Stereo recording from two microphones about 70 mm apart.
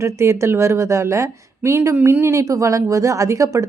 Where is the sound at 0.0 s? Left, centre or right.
Right.